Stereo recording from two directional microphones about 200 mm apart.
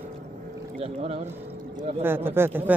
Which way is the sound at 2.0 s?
10° right (ahead or behind).